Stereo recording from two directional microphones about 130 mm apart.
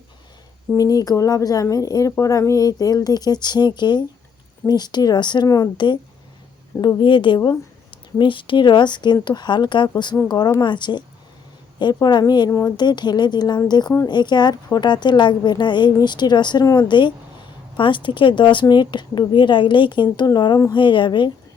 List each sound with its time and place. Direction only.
0.8 s a woman's voice: 30° left (ahead or behind)
12.5 s speech: 20° left (ahead or behind)
12.7 s a woman's voice: 35° left (ahead or behind)